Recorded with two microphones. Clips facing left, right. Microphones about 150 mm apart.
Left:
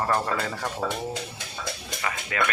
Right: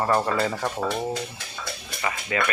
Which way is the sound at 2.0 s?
10° right (ahead or behind).